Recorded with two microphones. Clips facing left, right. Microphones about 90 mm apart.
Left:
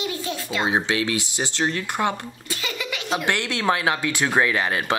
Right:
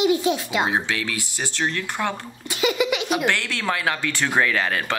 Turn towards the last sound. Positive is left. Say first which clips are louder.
# left 1 dB
turn(degrees=20)  # may be behind; listen again after turning